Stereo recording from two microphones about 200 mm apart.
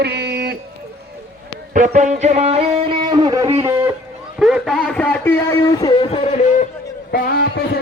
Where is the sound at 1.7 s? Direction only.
40° right (ahead or behind); by 3.9 s 15° right (ahead or behind).